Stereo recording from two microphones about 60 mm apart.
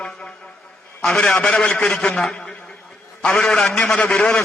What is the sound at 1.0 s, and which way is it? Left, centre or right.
Speech, centre.